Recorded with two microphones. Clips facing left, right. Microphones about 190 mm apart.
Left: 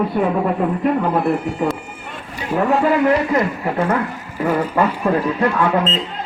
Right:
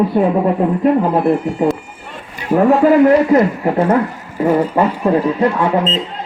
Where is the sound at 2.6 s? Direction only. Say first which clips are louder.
Right 6 dB; 40° right (ahead or behind).